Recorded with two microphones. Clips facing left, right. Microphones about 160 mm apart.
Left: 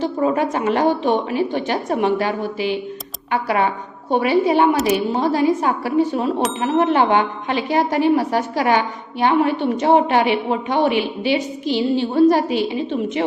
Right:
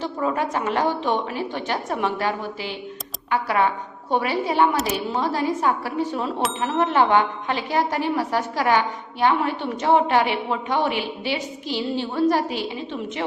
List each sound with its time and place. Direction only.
0.2 s a woman's voice: 20° left (ahead or behind)